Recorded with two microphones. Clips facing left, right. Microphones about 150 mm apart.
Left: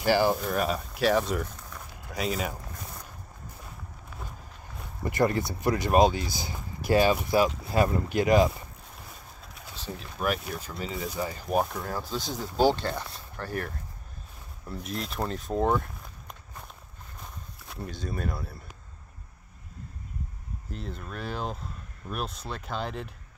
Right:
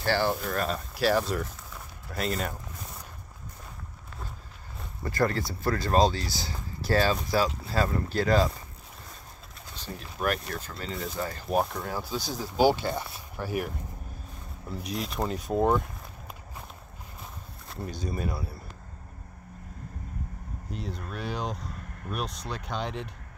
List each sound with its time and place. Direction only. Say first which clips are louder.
0.0 s speech: left 3 dB; 10° left (ahead or behind)
5.0 s speech: left 2 dB; 20° left (ahead or behind)
9.9 s speech: even; centre (ahead or behind)
14.7 s speech: right 1 dB; centre (ahead or behind)
17.6 s speech: right 1 dB; centre (ahead or behind)
20.7 s speech: right 1 dB; centre (ahead or behind)